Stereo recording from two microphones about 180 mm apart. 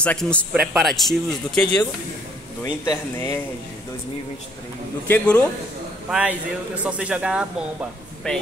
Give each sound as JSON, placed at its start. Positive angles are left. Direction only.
{"t": 0.0, "sound": "a man's voice", "side_deg": 5}
{"t": 2.6, "sound": "speech", "side_deg": 20}
{"t": 5.0, "sound": "a man's voice", "side_deg": 10}
{"t": 6.0, "sound": "a man's voice", "side_deg": -5}
{"t": 8.3, "sound": "speech", "side_deg": 5}